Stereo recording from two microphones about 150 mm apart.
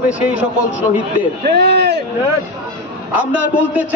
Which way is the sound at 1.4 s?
90° right.